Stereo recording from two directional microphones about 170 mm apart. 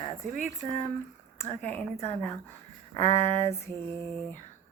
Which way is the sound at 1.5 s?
10° left (ahead or behind).